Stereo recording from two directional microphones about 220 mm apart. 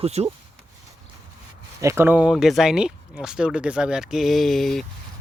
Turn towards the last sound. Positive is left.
turn(degrees=0)  # may be behind; listen again after turning